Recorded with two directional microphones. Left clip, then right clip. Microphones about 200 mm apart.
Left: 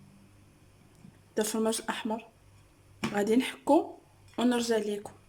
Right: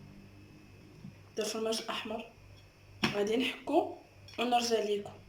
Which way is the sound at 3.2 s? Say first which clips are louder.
Left 4 dB; 55° left (ahead or behind).